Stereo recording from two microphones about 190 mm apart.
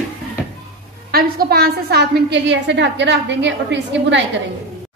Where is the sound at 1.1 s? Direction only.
55° right (ahead or behind).